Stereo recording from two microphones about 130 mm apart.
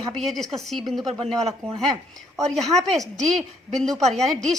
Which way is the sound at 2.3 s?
Centre (ahead or behind).